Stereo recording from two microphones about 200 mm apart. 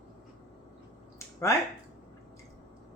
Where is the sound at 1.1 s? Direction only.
15° left (ahead or behind).